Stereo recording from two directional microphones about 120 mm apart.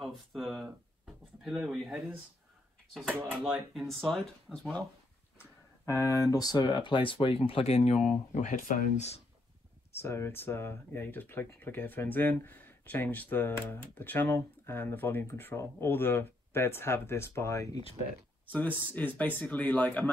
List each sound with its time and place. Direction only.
0.0 s speech: centre (ahead or behind)
5.4 s a sound: 25° left (ahead or behind)
6.3 s speech: 30° left (ahead or behind); by 8.1 s 65° left (ahead or behind)
8.4 s speech: 80° left
9.9 s speech: 20° left (ahead or behind)
18.9 s speech: 15° left (ahead or behind)